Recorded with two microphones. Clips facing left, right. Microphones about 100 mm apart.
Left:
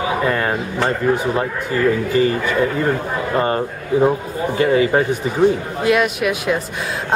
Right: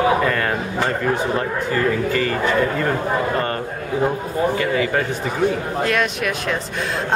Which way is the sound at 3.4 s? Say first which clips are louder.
Left 4 dB; 15° left (ahead or behind).